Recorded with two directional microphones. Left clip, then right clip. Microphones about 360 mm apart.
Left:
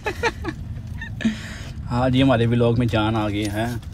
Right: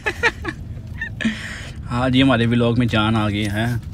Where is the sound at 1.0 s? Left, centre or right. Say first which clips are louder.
Right 3 dB; centre.